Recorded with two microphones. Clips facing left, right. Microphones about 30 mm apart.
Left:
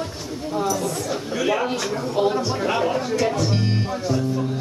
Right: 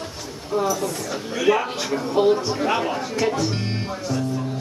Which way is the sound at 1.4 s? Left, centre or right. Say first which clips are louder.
Right 3 dB; centre.